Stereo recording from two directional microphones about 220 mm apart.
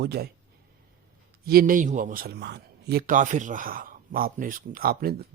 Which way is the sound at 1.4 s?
40° right (ahead or behind).